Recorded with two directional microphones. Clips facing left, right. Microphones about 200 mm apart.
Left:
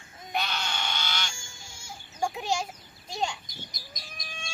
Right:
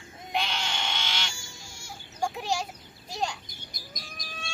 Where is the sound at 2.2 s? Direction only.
5° left (ahead or behind).